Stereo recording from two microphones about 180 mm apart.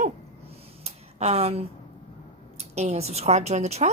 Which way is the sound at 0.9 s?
35° right (ahead or behind).